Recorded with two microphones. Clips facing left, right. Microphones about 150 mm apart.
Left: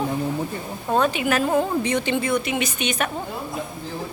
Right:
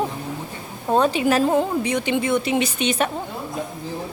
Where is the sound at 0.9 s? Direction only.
30° right (ahead or behind).